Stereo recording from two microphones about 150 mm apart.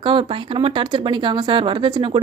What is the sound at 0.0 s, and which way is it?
Speech, 35° right (ahead or behind).